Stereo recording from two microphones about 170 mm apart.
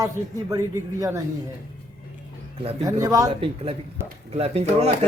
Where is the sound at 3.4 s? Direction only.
35° right (ahead or behind).